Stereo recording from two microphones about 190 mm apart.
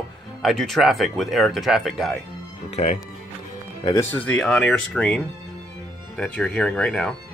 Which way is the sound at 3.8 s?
15° left (ahead or behind).